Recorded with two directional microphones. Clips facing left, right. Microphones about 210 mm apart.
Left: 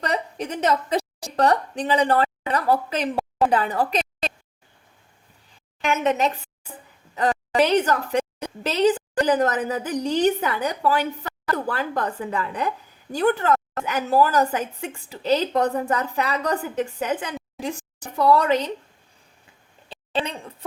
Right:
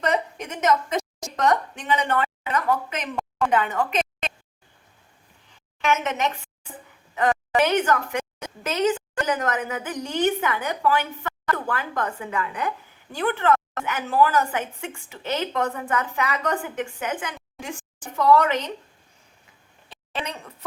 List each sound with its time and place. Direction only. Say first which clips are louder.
0.0 s a woman's voice: right 1 dB; 35° left (ahead or behind)
5.8 s a woman's voice: left 3 dB; 35° left (ahead or behind)
20.1 s speech: left 5 dB; 30° left (ahead or behind)